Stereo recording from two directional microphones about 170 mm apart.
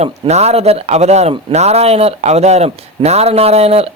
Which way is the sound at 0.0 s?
40° right (ahead or behind).